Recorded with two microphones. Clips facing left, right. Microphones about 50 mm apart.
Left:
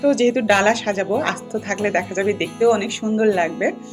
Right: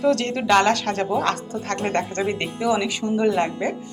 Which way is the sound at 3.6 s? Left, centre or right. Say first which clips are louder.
Left 4 dB; centre.